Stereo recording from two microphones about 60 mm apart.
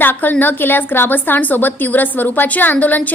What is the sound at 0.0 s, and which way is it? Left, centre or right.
A woman's voice, left.